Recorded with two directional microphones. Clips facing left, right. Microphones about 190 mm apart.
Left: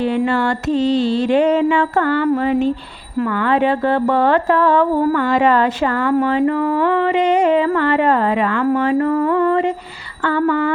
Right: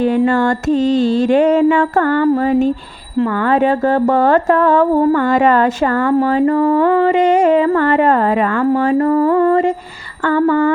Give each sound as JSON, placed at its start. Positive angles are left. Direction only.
{"t": 0.3, "sound": "mantra", "side_deg": -45}
{"t": 6.1, "sound": "music", "side_deg": -35}
{"t": 10.2, "sound": "mantra", "side_deg": -45}